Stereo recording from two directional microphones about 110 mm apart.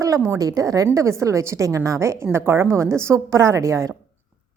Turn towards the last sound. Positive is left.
turn(degrees=-30)  # may be behind; listen again after turning